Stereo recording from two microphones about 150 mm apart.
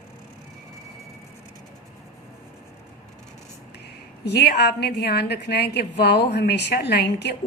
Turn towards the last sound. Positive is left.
turn(degrees=90)